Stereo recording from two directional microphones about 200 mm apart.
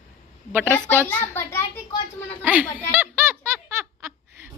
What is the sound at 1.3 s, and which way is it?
Speech, 15° left (ahead or behind).